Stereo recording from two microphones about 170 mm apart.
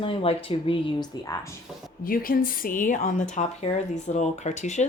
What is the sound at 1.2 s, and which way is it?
Speech, 20° left (ahead or behind).